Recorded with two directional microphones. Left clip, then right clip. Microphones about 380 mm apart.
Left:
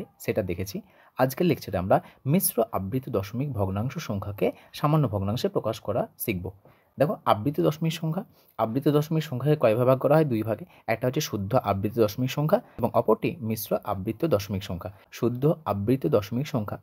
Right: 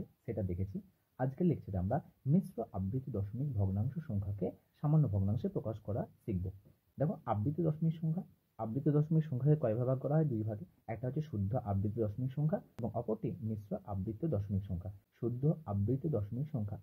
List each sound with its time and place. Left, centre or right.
1.1 s speech: left